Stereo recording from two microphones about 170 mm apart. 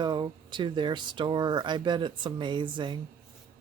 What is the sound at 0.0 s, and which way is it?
Speech, 25° right (ahead or behind).